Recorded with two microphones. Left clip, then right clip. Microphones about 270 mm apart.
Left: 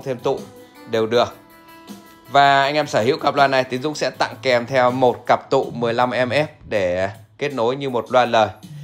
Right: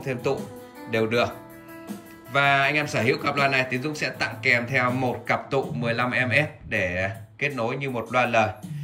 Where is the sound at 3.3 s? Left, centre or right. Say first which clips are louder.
Left 8 dB; left.